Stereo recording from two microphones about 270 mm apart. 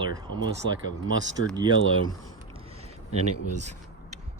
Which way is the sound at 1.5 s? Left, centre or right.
Centre.